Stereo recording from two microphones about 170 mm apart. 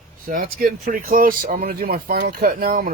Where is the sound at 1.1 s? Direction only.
55° right (ahead or behind).